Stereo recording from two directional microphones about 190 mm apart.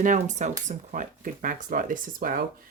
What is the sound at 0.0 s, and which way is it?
Speech, 40° right (ahead or behind).